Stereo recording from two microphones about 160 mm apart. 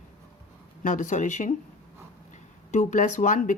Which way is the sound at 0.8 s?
50° left (ahead or behind).